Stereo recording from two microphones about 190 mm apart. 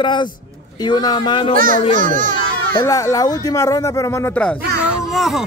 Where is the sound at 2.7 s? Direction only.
15° left (ahead or behind).